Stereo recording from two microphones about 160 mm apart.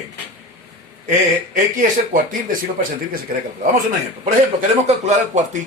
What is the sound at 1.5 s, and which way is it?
Speech, 55° right (ahead or behind).